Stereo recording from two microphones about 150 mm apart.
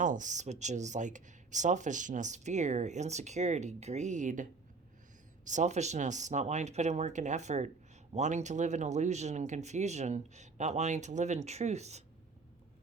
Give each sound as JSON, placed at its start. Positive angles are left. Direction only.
{"t": 0.0, "sound": "speech", "side_deg": -55}
{"t": 5.5, "sound": "speech", "side_deg": -55}